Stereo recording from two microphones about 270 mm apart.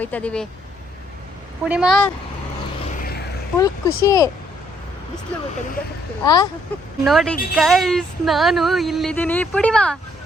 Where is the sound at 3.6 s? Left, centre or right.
Centre.